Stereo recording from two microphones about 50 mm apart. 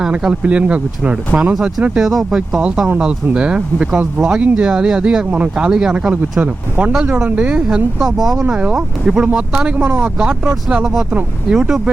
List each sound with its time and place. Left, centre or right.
0.0 s speech: centre
2.0 s speech: centre
2.6 s speech: right
7.9 s speech: centre
8.4 s speech: right
10.2 s speech: centre
11.1 s speech: right